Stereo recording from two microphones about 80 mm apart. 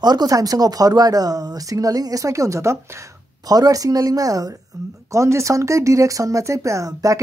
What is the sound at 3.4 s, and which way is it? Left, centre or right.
Speech, right.